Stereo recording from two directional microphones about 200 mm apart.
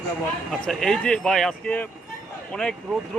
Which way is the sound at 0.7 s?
Centre (ahead or behind).